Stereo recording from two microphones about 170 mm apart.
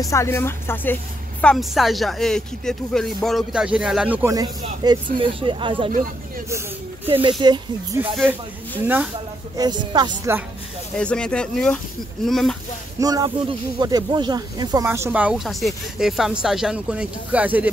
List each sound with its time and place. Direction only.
0.0 s speech: 15° left (ahead or behind)
1.4 s speech: centre (ahead or behind)
4.3 s speech: 25° right (ahead or behind)
7.1 s speech: 30° right (ahead or behind)
8.8 s speech: 10° right (ahead or behind)
9.6 s speech: 25° right (ahead or behind)
11.0 s speech: 5° left (ahead or behind)
13.0 s speech: 20° right (ahead or behind)